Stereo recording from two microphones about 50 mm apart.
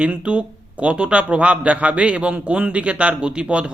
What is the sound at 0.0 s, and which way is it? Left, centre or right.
A man's voice, right.